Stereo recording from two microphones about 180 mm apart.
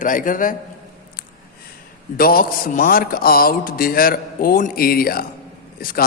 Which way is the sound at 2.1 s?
55° left (ahead or behind).